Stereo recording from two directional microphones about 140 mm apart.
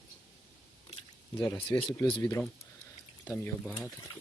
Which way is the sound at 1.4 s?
20° left (ahead or behind).